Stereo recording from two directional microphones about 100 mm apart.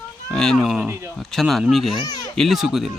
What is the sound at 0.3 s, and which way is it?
Speech, 5° left (ahead or behind).